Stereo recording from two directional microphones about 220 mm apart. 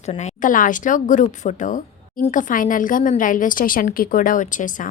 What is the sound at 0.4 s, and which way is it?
A woman's voice, 35° left (ahead or behind).